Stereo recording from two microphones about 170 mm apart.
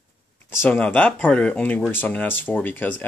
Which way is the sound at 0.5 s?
10° left (ahead or behind).